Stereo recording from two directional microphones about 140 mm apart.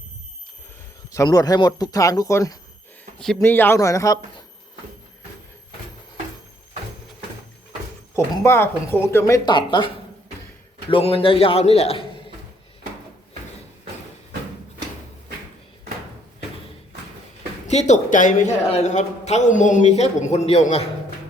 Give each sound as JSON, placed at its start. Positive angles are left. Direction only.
{"t": 1.1, "sound": "speech", "side_deg": 25}
{"t": 8.1, "sound": "speech", "side_deg": 15}
{"t": 10.8, "sound": "a man's voice", "side_deg": 40}
{"t": 17.7, "sound": "speech", "side_deg": 55}
{"t": 18.7, "sound": "a man's voice", "side_deg": 55}